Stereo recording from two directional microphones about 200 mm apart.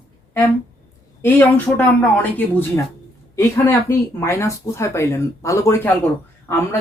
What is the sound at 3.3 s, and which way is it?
Speech, 15° left (ahead or behind).